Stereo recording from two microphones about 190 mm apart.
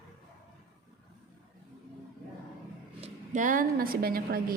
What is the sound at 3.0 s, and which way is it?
A woman's voice, 40° right (ahead or behind).